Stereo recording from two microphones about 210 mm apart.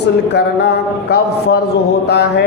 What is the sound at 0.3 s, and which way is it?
A man's voice, 50° left (ahead or behind).